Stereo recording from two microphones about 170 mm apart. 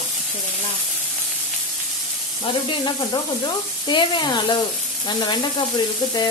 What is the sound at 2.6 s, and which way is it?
Sizzle, 25° left (ahead or behind).